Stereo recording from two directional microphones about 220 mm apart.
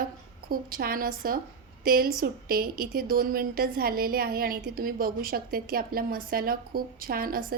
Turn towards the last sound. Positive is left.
turn(degrees=-40)  # may be behind; listen again after turning